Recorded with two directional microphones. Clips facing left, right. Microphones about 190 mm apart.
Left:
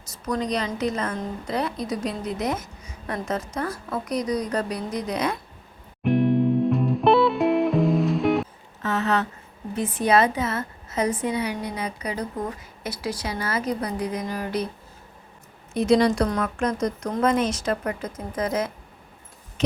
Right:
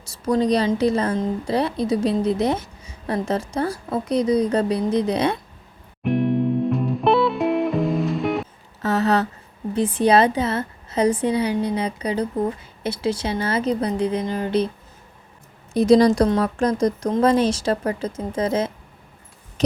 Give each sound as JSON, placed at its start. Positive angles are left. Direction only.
{"t": 0.3, "sound": "a woman's voice", "side_deg": -30}
{"t": 6.0, "sound": "music", "side_deg": 0}
{"t": 8.8, "sound": "a sound", "side_deg": -35}
{"t": 9.7, "sound": "a woman's voice", "side_deg": -30}
{"t": 15.7, "sound": "a woman's voice", "side_deg": -35}